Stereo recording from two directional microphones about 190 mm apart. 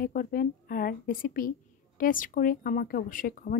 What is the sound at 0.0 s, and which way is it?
Speech, 50° left (ahead or behind).